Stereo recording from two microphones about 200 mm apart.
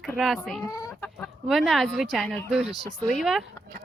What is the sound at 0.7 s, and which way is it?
Chicken, 15° left (ahead or behind).